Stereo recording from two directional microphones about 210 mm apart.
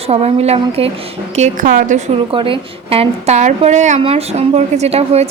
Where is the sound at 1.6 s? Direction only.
45° right (ahead or behind).